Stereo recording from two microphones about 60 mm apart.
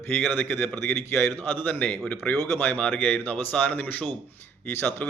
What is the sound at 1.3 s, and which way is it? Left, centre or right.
A man's voice, left.